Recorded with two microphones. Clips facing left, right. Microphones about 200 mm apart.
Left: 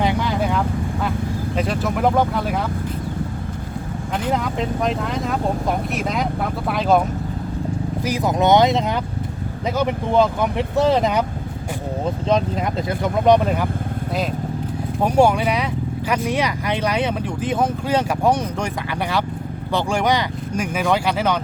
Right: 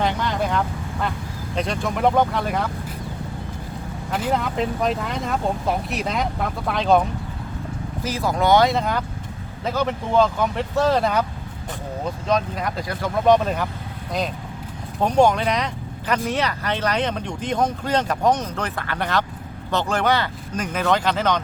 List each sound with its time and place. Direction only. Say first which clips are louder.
0.0 s vehicle: left 2 dB; 10° left (ahead or behind)
1.5 s speech: left 1 dB; 5° left (ahead or behind)
4.1 s speech: even; 5° right (ahead or behind)
8.0 s speech: left 2 dB; 15° left (ahead or behind)
15.0 s speech: left 1 dB; 10° left (ahead or behind)